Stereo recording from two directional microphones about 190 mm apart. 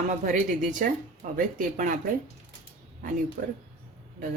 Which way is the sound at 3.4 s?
45° right (ahead or behind).